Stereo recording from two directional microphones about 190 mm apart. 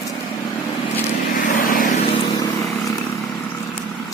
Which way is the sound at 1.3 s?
45° left (ahead or behind).